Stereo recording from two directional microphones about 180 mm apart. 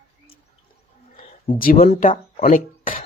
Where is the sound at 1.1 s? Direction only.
50° left (ahead or behind).